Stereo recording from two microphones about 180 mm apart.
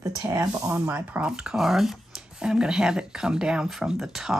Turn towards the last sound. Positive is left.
turn(degrees=-5)  # may be behind; listen again after turning